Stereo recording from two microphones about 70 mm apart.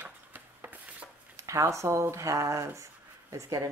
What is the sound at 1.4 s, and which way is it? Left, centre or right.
Speech, right.